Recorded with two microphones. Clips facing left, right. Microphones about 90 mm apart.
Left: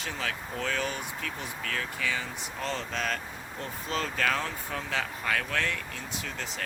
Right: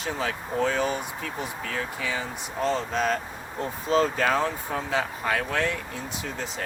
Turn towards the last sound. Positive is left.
turn(degrees=-25)  # may be behind; listen again after turning